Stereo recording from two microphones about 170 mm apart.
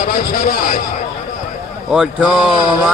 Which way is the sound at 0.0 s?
55° left (ahead or behind).